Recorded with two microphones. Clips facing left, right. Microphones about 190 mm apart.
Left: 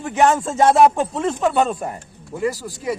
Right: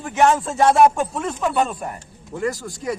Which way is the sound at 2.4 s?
5° left (ahead or behind).